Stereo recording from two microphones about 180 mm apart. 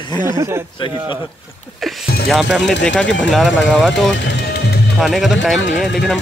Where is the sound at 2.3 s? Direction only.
Centre (ahead or behind).